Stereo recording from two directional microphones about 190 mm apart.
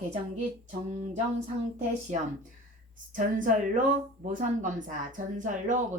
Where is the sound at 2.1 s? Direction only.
40° right (ahead or behind).